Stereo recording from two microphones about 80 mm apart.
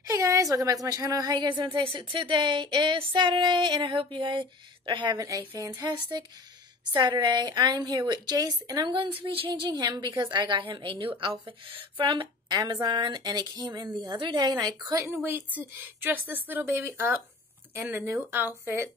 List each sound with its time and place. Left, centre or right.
0.0 s speech: right
5.6 s a woman's voice: right
5.9 s a woman's voice: right
8.9 s a woman's voice: right
9.8 s a woman's voice: right
15.0 s speech: right